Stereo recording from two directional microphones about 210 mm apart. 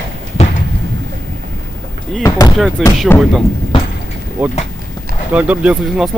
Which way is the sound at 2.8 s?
Centre (ahead or behind).